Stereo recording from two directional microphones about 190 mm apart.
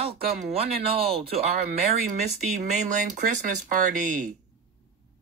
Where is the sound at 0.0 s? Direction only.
30° right (ahead or behind).